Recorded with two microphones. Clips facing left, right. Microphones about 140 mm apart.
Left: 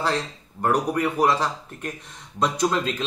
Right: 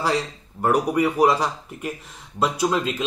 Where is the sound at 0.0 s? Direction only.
10° right (ahead or behind).